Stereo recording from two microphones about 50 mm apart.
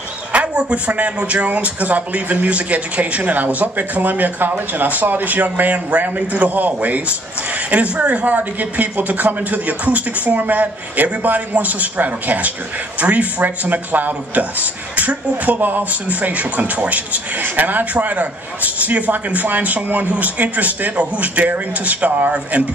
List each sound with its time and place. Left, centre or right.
0.3 s speech: right